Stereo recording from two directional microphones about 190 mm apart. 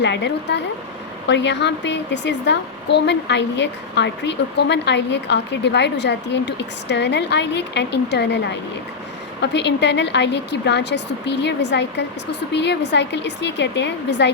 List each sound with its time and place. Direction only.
0.0 s a woman's voice: 65° left (ahead or behind)